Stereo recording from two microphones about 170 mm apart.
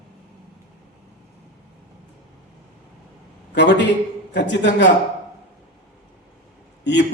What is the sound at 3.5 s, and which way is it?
A man's voice, 90° left.